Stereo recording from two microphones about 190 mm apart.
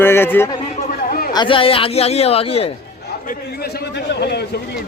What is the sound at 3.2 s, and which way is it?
A man's voice, 55° left (ahead or behind).